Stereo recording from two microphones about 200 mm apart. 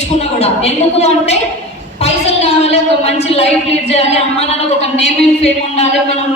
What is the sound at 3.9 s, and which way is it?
A woman's voice, 30° left (ahead or behind).